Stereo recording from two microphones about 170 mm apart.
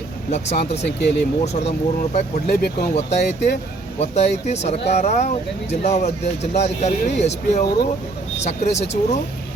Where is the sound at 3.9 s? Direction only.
40° left (ahead or behind).